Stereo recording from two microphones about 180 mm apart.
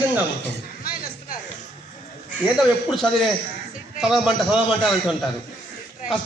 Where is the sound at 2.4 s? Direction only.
5° right (ahead or behind).